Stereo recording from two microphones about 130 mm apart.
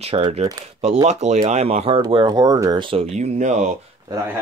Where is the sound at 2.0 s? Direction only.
40° right (ahead or behind).